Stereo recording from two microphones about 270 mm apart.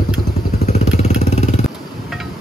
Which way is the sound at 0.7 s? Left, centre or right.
Left.